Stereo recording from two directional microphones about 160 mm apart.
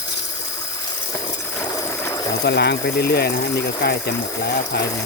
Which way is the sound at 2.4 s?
90° left.